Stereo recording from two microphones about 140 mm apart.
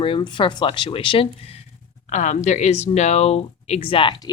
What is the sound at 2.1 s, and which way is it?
Speech, 55° left (ahead or behind).